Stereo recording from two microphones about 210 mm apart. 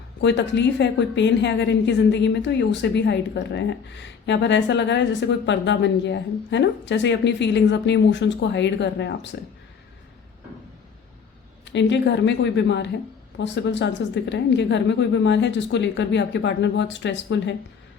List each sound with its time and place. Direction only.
0.2 s a woman's voice: 60° left (ahead or behind)
11.6 s a woman's voice: 60° left (ahead or behind)